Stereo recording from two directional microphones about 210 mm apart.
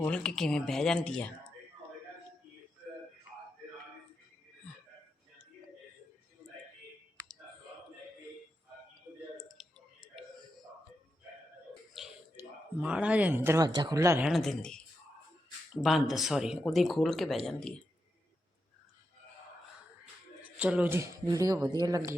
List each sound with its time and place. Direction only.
0.0 s speech: 5° left (ahead or behind)
9.6 s clicking: centre (ahead or behind)
12.0 s a sound: centre (ahead or behind)
12.8 s speech: 5° right (ahead or behind)
14.3 s speech: centre (ahead or behind)
20.4 s speech: 5° right (ahead or behind)